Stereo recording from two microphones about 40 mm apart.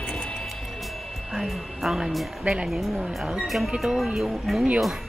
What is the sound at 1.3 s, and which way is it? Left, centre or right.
Music, centre.